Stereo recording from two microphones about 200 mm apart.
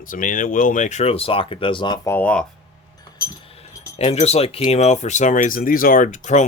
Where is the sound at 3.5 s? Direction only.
30° left (ahead or behind).